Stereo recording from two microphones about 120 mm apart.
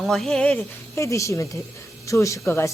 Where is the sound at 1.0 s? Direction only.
25° left (ahead or behind).